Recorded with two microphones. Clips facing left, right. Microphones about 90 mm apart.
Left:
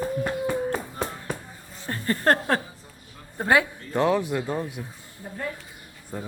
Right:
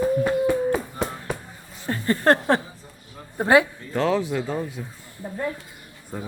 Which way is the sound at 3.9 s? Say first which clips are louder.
Even; 10° left (ahead or behind).